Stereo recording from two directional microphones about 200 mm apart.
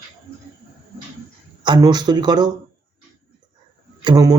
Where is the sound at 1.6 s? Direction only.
20° right (ahead or behind).